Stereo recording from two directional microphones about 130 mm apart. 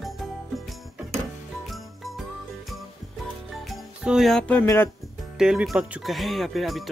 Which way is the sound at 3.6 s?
Centre (ahead or behind).